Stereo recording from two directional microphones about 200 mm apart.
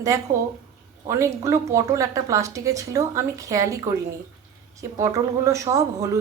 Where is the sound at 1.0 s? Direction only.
15° right (ahead or behind).